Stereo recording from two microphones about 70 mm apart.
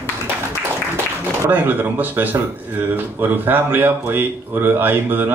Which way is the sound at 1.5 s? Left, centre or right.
Right.